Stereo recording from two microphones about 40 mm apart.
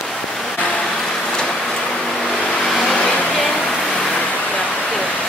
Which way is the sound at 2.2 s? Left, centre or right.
Centre.